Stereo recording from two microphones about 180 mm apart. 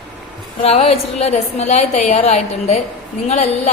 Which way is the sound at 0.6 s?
35° left (ahead or behind).